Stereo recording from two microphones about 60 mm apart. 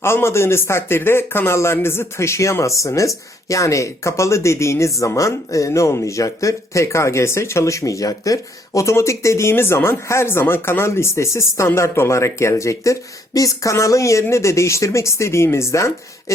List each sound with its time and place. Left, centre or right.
0.0 s a man's voice: left